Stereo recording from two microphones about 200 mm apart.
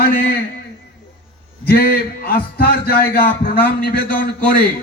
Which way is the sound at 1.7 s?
50° left (ahead or behind).